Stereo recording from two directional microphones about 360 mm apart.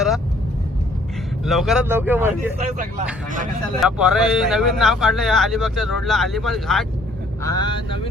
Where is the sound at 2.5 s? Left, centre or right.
Right.